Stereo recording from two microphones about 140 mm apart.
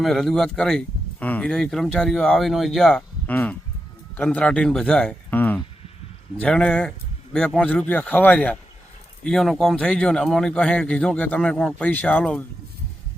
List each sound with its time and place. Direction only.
0.0 s speech: centre (ahead or behind)